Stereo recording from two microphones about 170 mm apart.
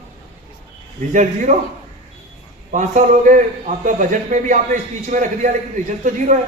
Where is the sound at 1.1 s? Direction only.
45° right (ahead or behind).